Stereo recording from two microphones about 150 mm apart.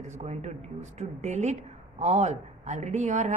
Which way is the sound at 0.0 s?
50° right (ahead or behind).